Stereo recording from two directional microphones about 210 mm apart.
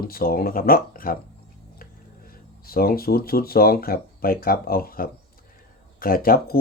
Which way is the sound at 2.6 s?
45° left (ahead or behind).